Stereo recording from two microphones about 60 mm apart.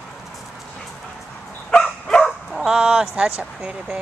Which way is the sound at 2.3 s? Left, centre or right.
Centre.